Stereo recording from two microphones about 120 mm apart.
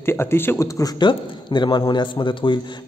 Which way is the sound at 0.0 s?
20° left (ahead or behind).